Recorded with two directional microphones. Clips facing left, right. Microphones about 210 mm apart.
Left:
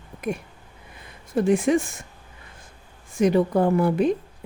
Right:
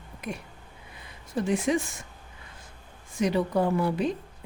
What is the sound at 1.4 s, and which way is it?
Speech, 50° left (ahead or behind).